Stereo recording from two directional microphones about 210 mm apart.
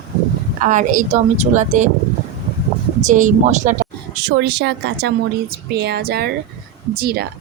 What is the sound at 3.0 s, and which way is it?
Speech, 35° right (ahead or behind).